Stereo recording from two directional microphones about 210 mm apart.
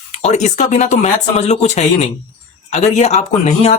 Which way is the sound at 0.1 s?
30° left (ahead or behind).